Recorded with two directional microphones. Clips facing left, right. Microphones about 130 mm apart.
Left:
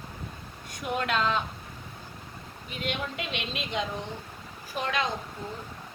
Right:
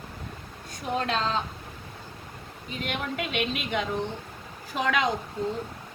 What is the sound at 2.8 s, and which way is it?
A woman's voice, 50° right (ahead or behind).